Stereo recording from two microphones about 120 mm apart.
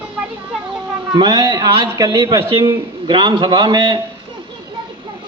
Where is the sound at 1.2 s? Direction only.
35° right (ahead or behind).